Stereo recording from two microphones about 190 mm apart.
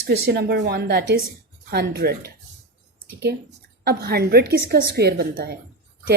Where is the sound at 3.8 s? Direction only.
55° right (ahead or behind).